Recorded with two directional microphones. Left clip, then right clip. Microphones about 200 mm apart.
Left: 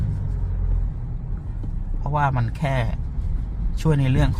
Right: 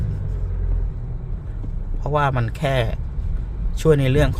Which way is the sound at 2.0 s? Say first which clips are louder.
Right 3 dB; 20° right (ahead or behind).